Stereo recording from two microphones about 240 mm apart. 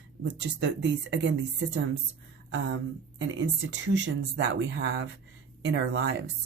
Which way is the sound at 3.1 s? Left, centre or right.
Right.